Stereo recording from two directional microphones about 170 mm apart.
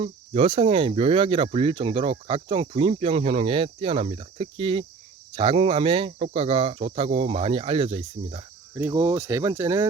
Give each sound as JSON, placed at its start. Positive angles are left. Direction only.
{"t": 0.0, "sound": "speech", "side_deg": -35}
{"t": 8.7, "sound": "speech", "side_deg": -15}